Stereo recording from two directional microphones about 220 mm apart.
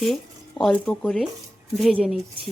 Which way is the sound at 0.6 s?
Centre (ahead or behind).